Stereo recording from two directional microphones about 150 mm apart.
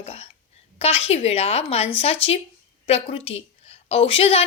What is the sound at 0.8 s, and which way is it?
A woman's voice, 40° left (ahead or behind).